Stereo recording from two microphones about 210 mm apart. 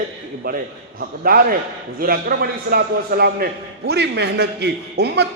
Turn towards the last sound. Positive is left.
turn(degrees=-50)  # may be behind; listen again after turning